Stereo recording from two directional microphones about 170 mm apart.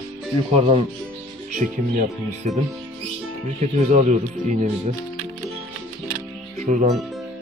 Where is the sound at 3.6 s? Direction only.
45° right (ahead or behind).